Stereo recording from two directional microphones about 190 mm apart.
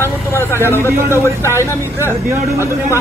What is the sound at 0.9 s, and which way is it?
Speech, 15° right (ahead or behind).